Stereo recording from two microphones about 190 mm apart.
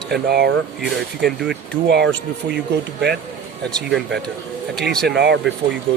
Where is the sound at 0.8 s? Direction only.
Centre (ahead or behind).